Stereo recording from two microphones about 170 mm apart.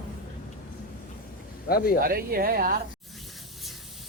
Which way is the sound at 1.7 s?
60° left (ahead or behind).